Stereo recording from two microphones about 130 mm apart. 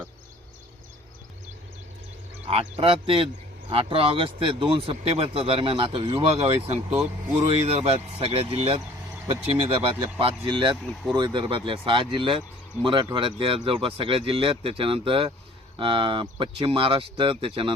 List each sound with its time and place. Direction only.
2.5 s speech: 50° right (ahead or behind)